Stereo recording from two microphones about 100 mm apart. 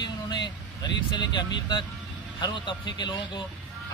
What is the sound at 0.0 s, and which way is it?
Vehicle, 45° left (ahead or behind).